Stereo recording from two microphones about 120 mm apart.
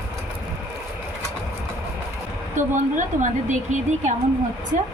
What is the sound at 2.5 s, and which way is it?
A woman's voice, 90° right.